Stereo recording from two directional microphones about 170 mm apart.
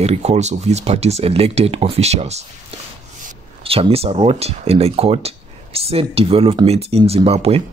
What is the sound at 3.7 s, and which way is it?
Speech, 35° right (ahead or behind).